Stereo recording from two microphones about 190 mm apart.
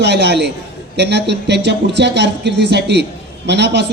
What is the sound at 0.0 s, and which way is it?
Speech, 65° right (ahead or behind).